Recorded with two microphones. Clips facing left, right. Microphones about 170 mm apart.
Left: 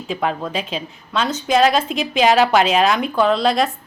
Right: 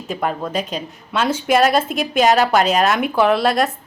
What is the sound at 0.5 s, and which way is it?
Speech, 45° right (ahead or behind).